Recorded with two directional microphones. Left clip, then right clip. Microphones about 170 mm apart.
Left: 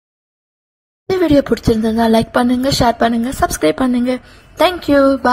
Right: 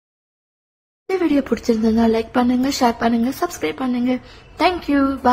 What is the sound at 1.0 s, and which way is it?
Speech, 25° left (ahead or behind).